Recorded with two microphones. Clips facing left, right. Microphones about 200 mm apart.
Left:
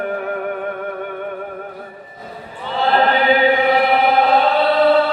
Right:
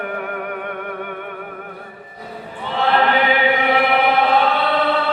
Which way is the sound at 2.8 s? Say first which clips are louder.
Left 1 dB; 35° left (ahead or behind).